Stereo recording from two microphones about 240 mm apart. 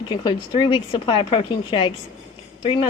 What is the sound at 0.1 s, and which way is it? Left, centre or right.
A woman's voice, centre.